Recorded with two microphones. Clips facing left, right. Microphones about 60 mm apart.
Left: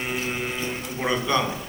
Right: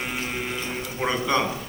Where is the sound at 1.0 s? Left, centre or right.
Right.